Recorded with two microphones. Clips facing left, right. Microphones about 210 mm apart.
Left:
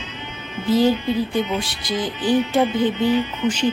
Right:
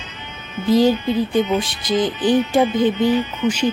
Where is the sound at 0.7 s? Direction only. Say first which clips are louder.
Right 2 dB; 15° right (ahead or behind).